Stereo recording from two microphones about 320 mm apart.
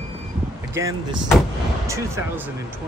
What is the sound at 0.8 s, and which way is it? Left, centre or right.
Speech, centre.